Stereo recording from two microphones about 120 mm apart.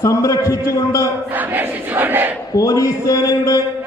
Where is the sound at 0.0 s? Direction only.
30° left (ahead or behind).